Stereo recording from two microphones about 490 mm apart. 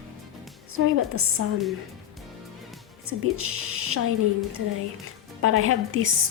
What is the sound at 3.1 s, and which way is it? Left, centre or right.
Speech, right.